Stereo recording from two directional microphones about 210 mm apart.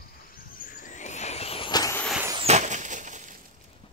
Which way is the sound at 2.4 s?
35° right (ahead or behind).